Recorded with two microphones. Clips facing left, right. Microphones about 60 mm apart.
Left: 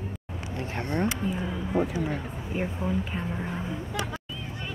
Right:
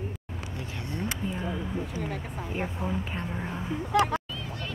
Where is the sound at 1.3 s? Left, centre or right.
Centre.